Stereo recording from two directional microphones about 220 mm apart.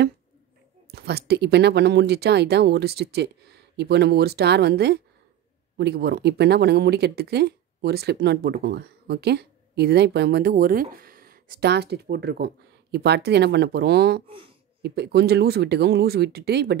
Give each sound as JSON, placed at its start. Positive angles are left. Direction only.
{"t": 0.9, "sound": "speech", "side_deg": -50}
{"t": 14.2, "sound": "speech", "side_deg": -25}
{"t": 14.8, "sound": "speech", "side_deg": -50}